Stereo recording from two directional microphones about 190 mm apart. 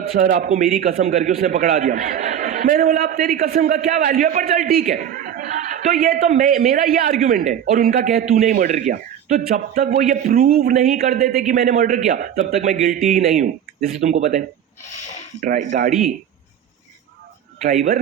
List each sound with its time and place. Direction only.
0.2 s a man's voice: 45° right (ahead or behind)